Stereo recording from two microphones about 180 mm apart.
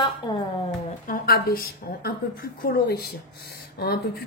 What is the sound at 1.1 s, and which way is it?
A woman's voice, 55° left (ahead or behind).